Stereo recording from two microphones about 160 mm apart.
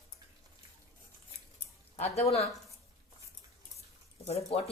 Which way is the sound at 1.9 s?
40° left (ahead or behind).